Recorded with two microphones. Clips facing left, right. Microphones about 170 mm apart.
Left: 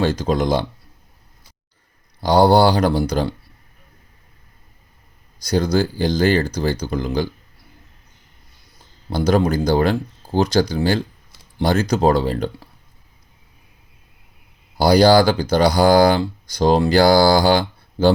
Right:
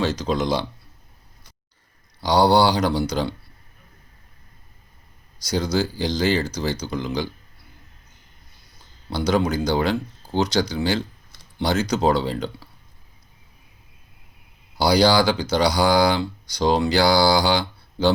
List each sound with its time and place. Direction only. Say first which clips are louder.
0.0 s speech: left 4 dB; 50° left (ahead or behind)
2.2 s speech: left 4 dB; 50° left (ahead or behind)
5.5 s speech: left 4 dB; 55° left (ahead or behind)
9.0 s speech: left 4 dB; 50° left (ahead or behind)
14.8 s speech: left 5 dB; 50° left (ahead or behind)